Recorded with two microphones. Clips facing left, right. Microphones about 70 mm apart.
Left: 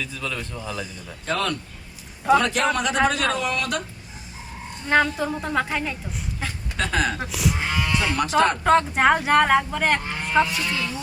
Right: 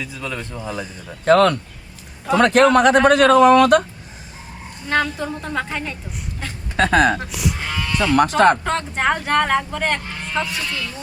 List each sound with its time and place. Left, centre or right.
0.0 s a man's voice: centre
0.7 s speech: right
1.2 s speech: right
4.9 s speech: centre
6.7 s speech: right
7.2 s speech: centre
7.6 s sheep: centre
8.6 s speech: centre